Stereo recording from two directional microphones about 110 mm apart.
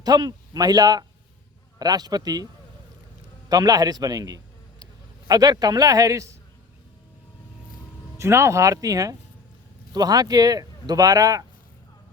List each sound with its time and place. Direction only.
0.0 s speech: 35° right (ahead or behind)
3.5 s speech: 35° right (ahead or behind)
8.2 s speech: 25° right (ahead or behind)